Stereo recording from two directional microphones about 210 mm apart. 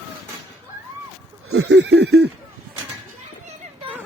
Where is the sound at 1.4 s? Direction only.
70° right (ahead or behind).